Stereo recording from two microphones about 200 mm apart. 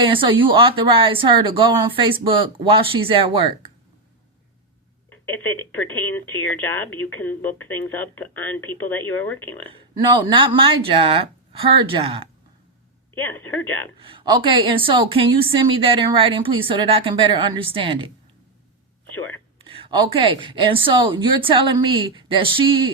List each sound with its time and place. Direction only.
0.0 s a woman's voice: 25° right (ahead or behind)
5.2 s speech: 10° left (ahead or behind)
10.2 s a woman's voice: 25° right (ahead or behind)
13.1 s speech: 10° left (ahead or behind)
14.0 s a woman's voice: 25° right (ahead or behind)
19.6 s a woman's voice: 25° right (ahead or behind)